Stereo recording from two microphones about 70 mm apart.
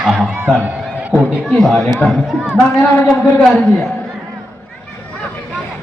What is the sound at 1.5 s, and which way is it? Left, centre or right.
Speech, centre.